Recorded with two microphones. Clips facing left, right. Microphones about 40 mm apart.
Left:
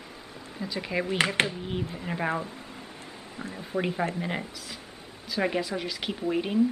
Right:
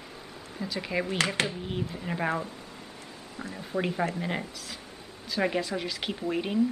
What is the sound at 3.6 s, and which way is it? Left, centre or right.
Speech, centre.